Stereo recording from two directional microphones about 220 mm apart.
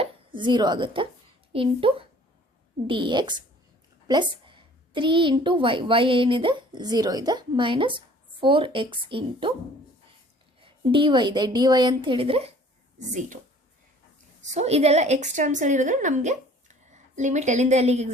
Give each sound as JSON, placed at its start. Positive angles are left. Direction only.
{"t": 0.0, "sound": "a woman's voice", "side_deg": -20}
{"t": 10.6, "sound": "a woman's voice", "side_deg": -20}
{"t": 14.4, "sound": "a woman's voice", "side_deg": -30}